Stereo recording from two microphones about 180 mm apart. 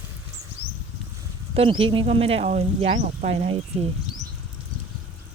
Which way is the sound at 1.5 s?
30° right (ahead or behind).